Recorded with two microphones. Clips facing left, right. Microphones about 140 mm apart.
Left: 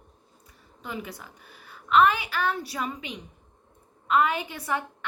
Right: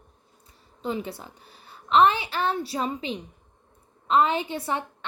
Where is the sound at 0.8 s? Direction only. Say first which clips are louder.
Right 6 dB; 30° right (ahead or behind).